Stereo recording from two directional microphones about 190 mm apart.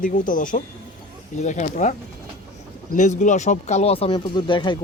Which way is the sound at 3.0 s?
40° left (ahead or behind).